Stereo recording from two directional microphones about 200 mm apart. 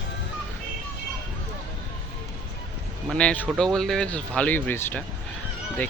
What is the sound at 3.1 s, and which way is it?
Speech, 5° left (ahead or behind).